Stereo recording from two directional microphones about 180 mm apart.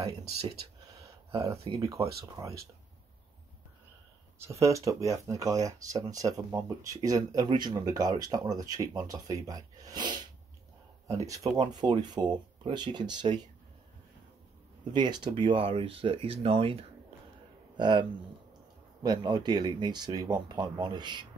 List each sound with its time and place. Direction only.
1.3 s speech: 15° right (ahead or behind)
4.4 s speech: 15° right (ahead or behind)
14.9 s speech: 25° right (ahead or behind)
19.0 s speech: 25° right (ahead or behind)